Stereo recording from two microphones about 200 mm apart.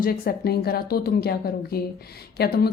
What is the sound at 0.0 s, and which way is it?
Speech, 45° left (ahead or behind).